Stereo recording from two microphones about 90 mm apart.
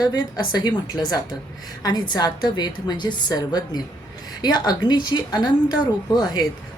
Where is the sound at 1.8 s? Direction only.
45° left (ahead or behind).